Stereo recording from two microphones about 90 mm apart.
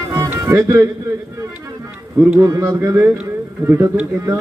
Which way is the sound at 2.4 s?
35° right (ahead or behind).